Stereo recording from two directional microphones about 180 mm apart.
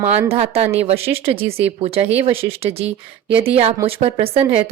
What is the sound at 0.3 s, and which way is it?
A woman's voice, 35° right (ahead or behind).